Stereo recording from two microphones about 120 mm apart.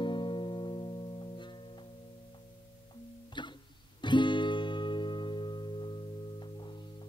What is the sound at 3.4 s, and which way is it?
Music, 40° left (ahead or behind).